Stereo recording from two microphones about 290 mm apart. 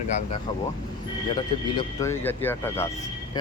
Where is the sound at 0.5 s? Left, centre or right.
Centre.